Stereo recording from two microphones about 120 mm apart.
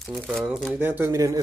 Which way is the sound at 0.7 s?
20° right (ahead or behind).